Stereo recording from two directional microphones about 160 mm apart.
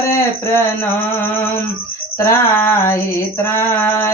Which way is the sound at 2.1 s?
15° left (ahead or behind).